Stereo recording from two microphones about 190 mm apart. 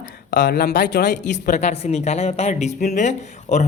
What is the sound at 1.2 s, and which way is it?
Speech, 40° left (ahead or behind).